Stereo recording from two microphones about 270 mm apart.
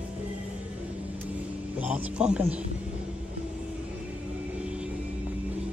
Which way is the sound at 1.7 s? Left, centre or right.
Centre.